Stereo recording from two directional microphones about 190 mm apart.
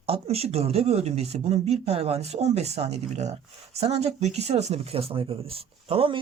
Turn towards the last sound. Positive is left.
turn(degrees=-30)  # may be behind; listen again after turning